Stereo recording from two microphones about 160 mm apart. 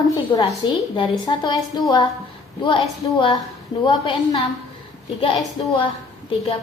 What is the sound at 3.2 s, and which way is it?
A woman's voice, 30° left (ahead or behind).